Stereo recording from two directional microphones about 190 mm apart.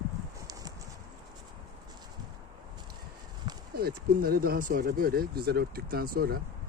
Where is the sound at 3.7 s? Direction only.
55° right (ahead or behind).